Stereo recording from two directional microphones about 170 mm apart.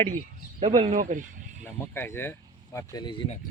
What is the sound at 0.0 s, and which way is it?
Speech, 45° right (ahead or behind).